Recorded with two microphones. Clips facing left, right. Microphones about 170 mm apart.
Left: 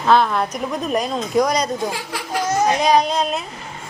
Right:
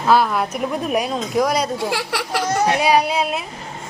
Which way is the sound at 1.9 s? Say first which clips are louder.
Right 3 dB; 75° right (ahead or behind).